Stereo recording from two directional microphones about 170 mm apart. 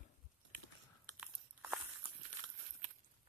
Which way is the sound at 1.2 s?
5° right (ahead or behind).